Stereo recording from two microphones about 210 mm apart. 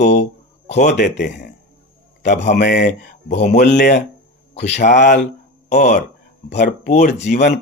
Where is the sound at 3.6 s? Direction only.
45° left (ahead or behind).